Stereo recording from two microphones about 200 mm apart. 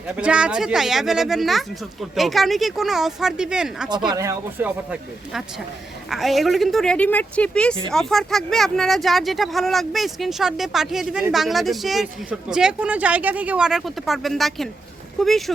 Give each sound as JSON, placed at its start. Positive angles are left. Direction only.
{"t": 0.2, "sound": "speech", "side_deg": -5}
{"t": 4.1, "sound": "speech", "side_deg": -15}